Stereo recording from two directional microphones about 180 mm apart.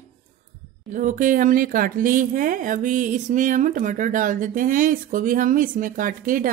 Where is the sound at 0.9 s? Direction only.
45° right (ahead or behind).